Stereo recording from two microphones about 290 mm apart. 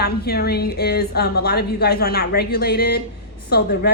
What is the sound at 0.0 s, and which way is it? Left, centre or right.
Speech, left.